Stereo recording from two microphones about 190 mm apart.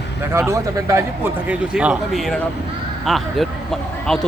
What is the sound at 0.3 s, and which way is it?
Speech, 15° right (ahead or behind).